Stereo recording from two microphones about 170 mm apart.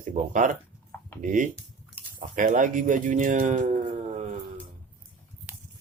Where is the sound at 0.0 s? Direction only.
45° right (ahead or behind).